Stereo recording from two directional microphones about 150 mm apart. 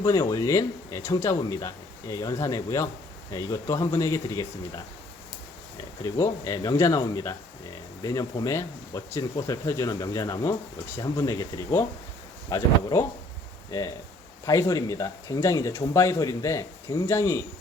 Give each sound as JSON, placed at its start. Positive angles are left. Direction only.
{"t": 0.0, "sound": "speech", "side_deg": 20}
{"t": 6.0, "sound": "speech", "side_deg": 20}